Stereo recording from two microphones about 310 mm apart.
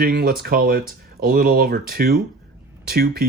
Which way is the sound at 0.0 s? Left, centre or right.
Right.